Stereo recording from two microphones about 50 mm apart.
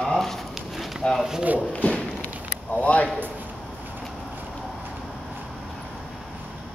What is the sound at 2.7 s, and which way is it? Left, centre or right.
Speech, left.